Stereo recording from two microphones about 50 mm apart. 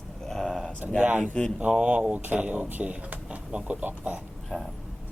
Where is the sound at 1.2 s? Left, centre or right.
Centre.